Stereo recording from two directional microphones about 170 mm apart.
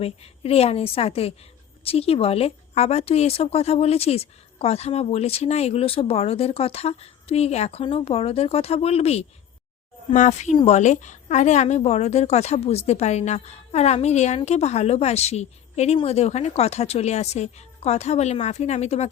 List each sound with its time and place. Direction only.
0.0 s a woman's voice: 35° left (ahead or behind)